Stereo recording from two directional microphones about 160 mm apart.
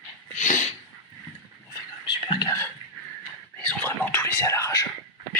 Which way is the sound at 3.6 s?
10° left (ahead or behind).